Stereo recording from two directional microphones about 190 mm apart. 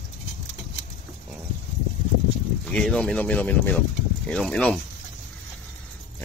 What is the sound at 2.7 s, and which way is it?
Speech, 5° left (ahead or behind).